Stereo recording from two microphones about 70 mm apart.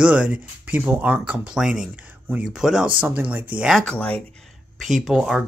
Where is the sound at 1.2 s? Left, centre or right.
Centre.